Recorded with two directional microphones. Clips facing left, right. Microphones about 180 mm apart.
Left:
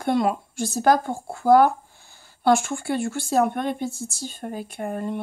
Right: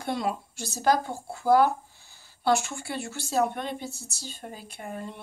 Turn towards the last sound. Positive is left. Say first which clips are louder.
# left 9 dB
turn(degrees=55)  # may be behind; listen again after turning